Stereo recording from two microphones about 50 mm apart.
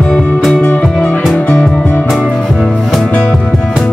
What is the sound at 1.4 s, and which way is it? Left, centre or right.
Music, left.